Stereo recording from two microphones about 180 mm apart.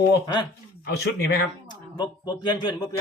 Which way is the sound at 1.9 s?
25° left (ahead or behind).